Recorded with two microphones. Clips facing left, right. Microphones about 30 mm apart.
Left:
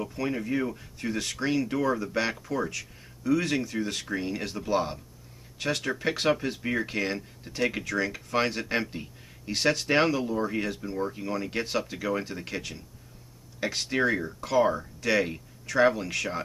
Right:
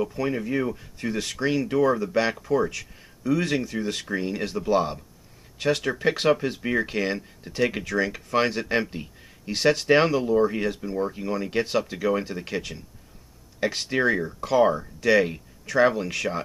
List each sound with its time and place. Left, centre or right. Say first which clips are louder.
0.0 s speech: right 4 dB; centre